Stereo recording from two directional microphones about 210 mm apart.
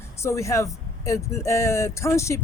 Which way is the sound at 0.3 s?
15° left (ahead or behind).